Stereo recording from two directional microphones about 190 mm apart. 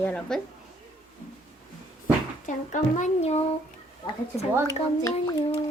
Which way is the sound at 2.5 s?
40° left (ahead or behind).